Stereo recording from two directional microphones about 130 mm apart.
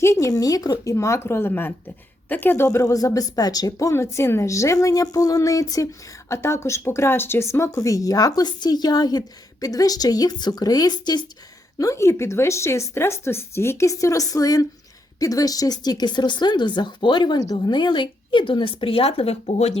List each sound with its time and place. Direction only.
0.0 s a woman's voice: 20° left (ahead or behind)
11.8 s a woman's voice: 25° left (ahead or behind); by 19.8 s 55° left (ahead or behind)